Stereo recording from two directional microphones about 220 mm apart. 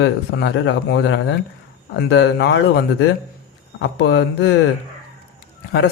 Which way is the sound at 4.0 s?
55° left (ahead or behind).